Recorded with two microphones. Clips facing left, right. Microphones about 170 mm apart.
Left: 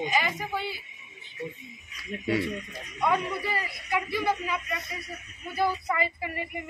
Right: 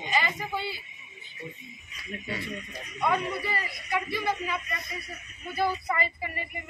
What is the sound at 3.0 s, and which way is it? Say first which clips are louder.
A man's voice: left 1 dB; 10° left (ahead or behind).